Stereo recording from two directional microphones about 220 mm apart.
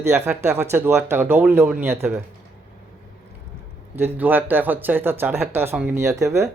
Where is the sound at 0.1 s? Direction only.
5° right (ahead or behind).